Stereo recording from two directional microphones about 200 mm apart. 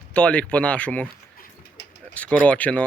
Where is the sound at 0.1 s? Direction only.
5° left (ahead or behind).